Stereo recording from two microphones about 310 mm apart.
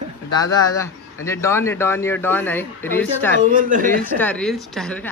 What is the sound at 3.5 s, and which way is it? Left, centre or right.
Speech, right.